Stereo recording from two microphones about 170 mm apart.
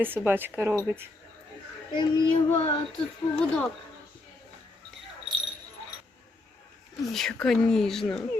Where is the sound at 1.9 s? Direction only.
25° left (ahead or behind).